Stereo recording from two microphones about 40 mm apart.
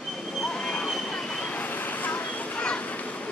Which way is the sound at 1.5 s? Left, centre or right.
Left.